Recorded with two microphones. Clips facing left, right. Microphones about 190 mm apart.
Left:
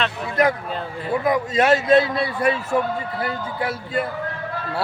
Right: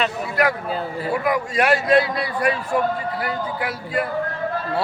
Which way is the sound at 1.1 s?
20° left (ahead or behind).